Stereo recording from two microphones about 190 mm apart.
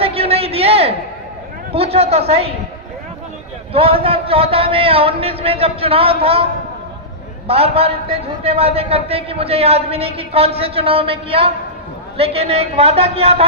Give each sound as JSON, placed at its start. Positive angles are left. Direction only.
{"t": 0.0, "sound": "a sound", "side_deg": -30}
{"t": 1.7, "sound": "a man's voice", "side_deg": -30}
{"t": 3.7, "sound": "a man's voice", "side_deg": -30}